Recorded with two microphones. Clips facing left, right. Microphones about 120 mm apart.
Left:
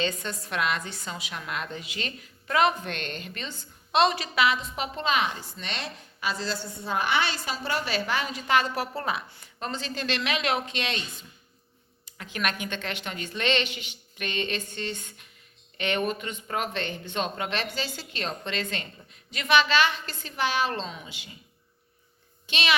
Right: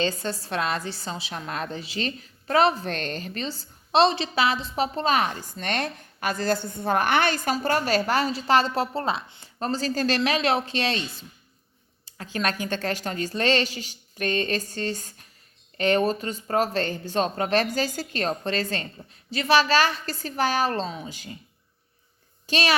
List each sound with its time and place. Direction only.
0.0 s a woman's voice: 30° right (ahead or behind)
22.4 s a child's voice: 40° right (ahead or behind)